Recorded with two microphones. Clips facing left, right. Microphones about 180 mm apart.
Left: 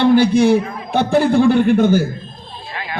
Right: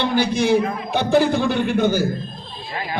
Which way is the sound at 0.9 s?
55° left (ahead or behind).